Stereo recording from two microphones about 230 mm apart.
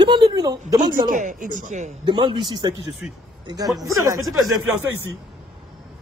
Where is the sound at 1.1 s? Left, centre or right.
Right.